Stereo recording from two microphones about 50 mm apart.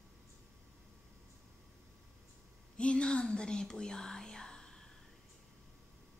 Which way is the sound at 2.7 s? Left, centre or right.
Left.